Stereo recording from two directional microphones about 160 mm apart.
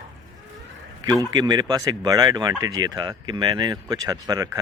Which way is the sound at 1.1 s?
25° right (ahead or behind).